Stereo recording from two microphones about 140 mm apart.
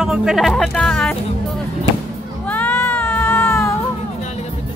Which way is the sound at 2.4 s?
10° left (ahead or behind).